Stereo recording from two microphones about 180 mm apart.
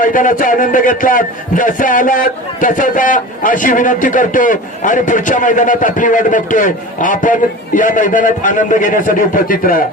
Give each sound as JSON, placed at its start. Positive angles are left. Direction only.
{"t": 0.0, "sound": "a man's voice", "side_deg": 50}